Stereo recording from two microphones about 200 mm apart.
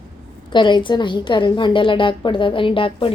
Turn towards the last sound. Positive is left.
turn(degrees=25)  # may be behind; listen again after turning